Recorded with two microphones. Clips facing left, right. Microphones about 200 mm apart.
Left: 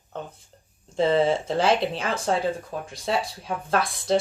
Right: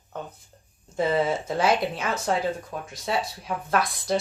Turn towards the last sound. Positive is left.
turn(degrees=30)  # may be behind; listen again after turning